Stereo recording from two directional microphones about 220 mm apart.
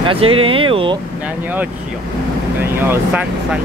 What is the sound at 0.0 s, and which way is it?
Speech, 25° right (ahead or behind).